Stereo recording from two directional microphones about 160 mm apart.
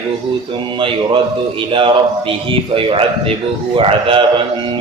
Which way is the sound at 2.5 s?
35° right (ahead or behind).